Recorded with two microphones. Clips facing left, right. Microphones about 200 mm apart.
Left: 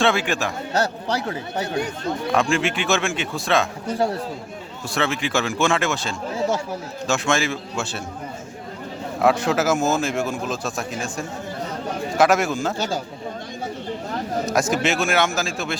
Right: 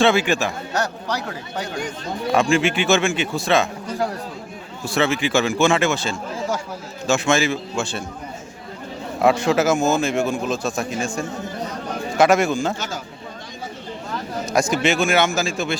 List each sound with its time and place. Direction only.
0.0 s a man's voice: centre (ahead or behind)
0.8 s speech: 30° left (ahead or behind)
2.3 s a man's voice: centre (ahead or behind)
3.9 s speech: 30° left (ahead or behind)
4.9 s a man's voice: 5° right (ahead or behind)
9.2 s a man's voice: centre (ahead or behind)
12.1 s a man's voice: centre (ahead or behind)
14.5 s a man's voice: centre (ahead or behind)